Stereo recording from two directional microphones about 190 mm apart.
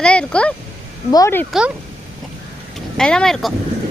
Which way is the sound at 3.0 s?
5° left (ahead or behind).